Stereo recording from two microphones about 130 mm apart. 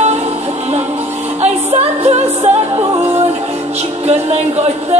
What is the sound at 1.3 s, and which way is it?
Music, 55° right (ahead or behind).